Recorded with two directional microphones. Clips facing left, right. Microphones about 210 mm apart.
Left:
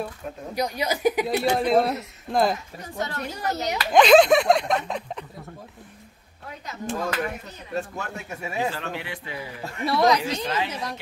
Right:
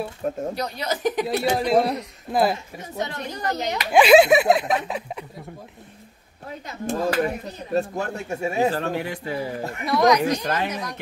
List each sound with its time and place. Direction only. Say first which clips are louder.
0.2 s a woman's voice: right 9 dB; 45° right (ahead or behind)
0.6 s speech: left 1 dB; 10° left (ahead or behind)
1.2 s speech: even; centre (ahead or behind)
2.5 s speech: right 1 dB; 20° right (ahead or behind)
6.9 s speech: right 5 dB; 35° right (ahead or behind)
8.5 s speech: right 5 dB; 40° right (ahead or behind)
9.8 s speech: right 2 dB; 30° left (ahead or behind)
10.2 s a woman's voice: right 4 dB; 55° right (ahead or behind)